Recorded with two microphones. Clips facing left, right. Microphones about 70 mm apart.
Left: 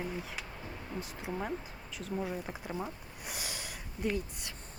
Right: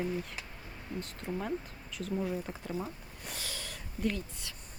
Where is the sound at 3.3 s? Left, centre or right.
Centre.